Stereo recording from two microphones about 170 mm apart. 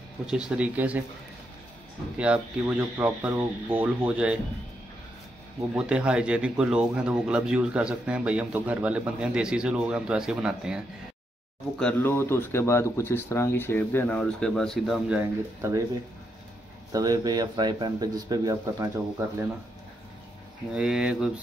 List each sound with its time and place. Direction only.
0.3 s speech: 5° right (ahead or behind)
2.1 s speech: 5° right (ahead or behind)
5.8 s speech: 5° right (ahead or behind)
11.8 s speech: 15° left (ahead or behind); by 15.8 s 15° right (ahead or behind)
16.9 s a man's voice: 20° right (ahead or behind)
20.7 s speech: 5° right (ahead or behind)